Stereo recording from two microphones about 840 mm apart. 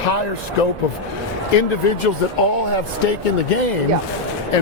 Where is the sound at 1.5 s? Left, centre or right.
Left.